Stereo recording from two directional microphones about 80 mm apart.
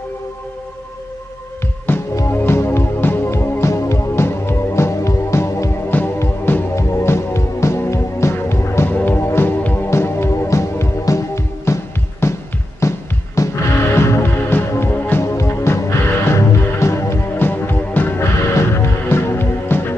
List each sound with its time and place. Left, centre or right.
1.9 s music: left
5.9 s music: left